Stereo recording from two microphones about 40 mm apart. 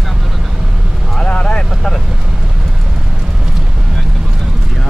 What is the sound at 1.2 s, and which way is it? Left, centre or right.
Vehicle, left.